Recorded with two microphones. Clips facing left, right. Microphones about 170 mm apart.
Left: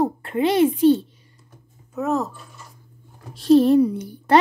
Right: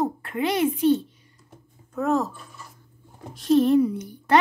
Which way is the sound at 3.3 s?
30° left (ahead or behind).